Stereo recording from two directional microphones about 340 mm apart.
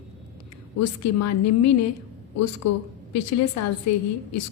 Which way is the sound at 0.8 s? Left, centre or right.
Left.